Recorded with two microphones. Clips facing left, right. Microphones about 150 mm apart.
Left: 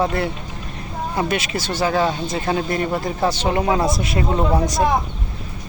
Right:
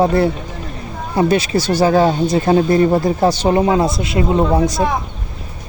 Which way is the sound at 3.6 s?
25° right (ahead or behind).